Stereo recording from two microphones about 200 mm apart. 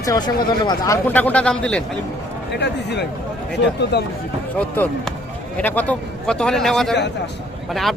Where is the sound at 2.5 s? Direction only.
55° left (ahead or behind).